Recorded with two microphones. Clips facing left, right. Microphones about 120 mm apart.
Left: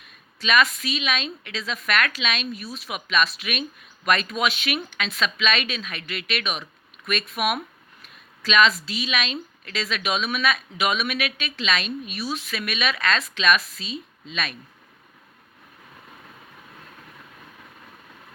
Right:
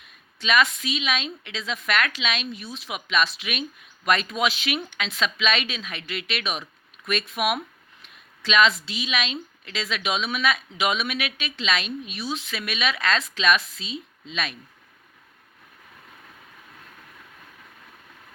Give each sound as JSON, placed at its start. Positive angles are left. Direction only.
{"t": 0.3, "sound": "a woman's voice", "side_deg": -25}